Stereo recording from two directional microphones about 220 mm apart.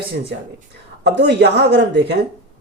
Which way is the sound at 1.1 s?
55° right (ahead or behind).